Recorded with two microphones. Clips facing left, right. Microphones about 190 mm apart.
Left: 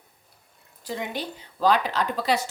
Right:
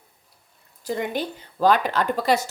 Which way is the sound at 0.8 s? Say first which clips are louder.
Right 5 dB; 50° right (ahead or behind).